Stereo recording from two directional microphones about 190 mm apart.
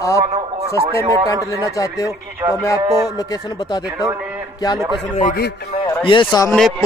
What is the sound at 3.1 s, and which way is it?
Speech, 20° left (ahead or behind).